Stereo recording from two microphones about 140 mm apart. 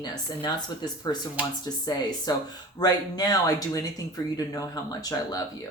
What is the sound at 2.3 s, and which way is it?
Speech, 30° left (ahead or behind).